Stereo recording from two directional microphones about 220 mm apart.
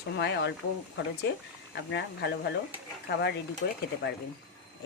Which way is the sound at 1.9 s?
50° left (ahead or behind).